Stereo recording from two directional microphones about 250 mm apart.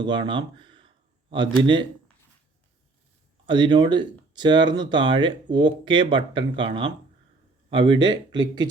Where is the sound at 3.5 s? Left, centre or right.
Centre.